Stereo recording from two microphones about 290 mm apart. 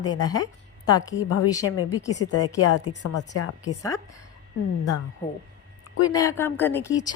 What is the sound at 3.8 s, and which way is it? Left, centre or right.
Speech, centre.